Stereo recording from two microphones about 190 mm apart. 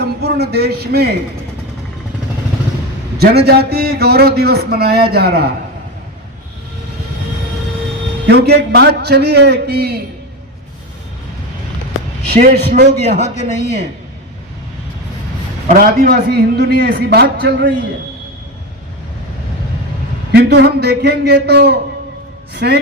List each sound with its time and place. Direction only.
0.0 s a man's voice: 60° right (ahead or behind)
3.2 s a man's voice: 55° right (ahead or behind)
8.3 s a man's voice: 60° right (ahead or behind)
12.3 s a man's voice: 40° right (ahead or behind)
12.5 s a man's voice: 60° right (ahead or behind)
15.6 s a man's voice: 45° right (ahead or behind)
20.3 s a man's voice: 60° right (ahead or behind)